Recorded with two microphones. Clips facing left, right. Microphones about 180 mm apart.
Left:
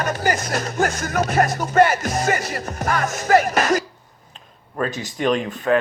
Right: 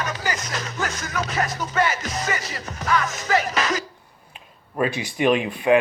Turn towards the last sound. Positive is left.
turn(degrees=-10)  # may be behind; listen again after turning